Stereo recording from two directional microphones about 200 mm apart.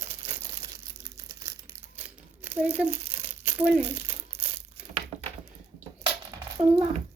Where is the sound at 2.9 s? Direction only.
30° right (ahead or behind).